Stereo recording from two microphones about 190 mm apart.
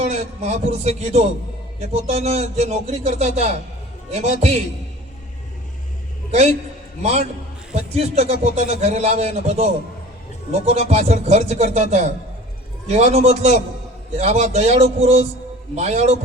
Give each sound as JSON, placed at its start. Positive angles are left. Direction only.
{"t": 0.0, "sound": "speech", "side_deg": -35}
{"t": 7.0, "sound": "speech", "side_deg": -35}